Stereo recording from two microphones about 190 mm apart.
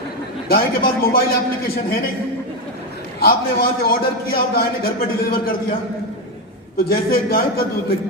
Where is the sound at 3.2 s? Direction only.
50° left (ahead or behind).